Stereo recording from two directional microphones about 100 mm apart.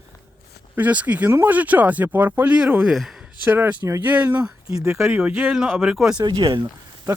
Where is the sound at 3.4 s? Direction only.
20° right (ahead or behind).